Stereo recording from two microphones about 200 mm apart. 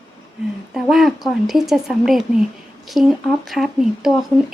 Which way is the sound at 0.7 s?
Centre (ahead or behind).